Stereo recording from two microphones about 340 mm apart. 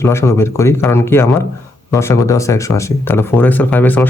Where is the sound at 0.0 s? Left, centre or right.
Centre.